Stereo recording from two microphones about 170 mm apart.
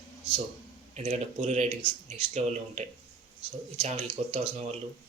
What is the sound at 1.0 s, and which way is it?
Speech, 40° right (ahead or behind).